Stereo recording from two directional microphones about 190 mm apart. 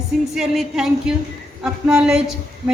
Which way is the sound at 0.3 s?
Centre (ahead or behind).